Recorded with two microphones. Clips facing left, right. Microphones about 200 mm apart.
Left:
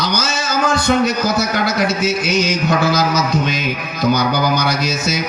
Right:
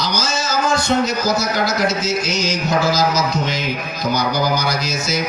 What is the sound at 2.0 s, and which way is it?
Speech, 60° left (ahead or behind).